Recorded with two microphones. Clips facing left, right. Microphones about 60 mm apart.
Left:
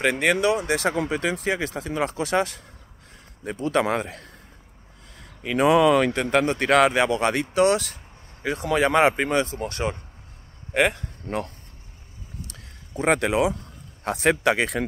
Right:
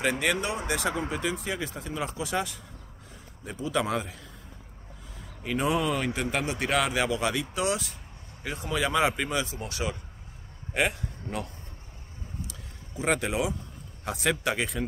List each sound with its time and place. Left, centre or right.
0.0 s speech: left
12.4 s a sound: left
14.0 s speech: left